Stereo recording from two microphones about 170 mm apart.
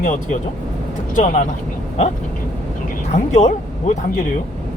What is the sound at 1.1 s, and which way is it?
Speech, 45° left (ahead or behind).